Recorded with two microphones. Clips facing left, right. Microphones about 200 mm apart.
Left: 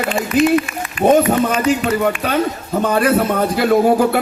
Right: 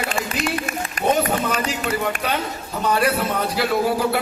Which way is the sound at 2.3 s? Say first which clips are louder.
Left 8 dB; 50° left (ahead or behind).